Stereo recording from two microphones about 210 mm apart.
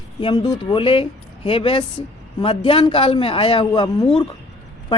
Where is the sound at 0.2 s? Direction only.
20° left (ahead or behind).